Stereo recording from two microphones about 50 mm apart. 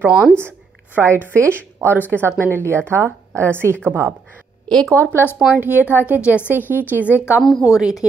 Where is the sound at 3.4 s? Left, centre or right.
Right.